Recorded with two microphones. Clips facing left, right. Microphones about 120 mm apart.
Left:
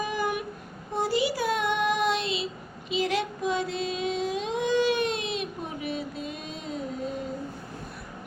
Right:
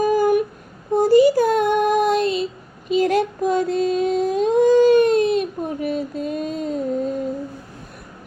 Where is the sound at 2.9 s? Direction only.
45° right (ahead or behind).